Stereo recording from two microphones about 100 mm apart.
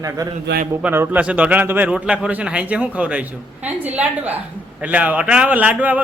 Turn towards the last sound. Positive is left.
turn(degrees=-15)  # may be behind; listen again after turning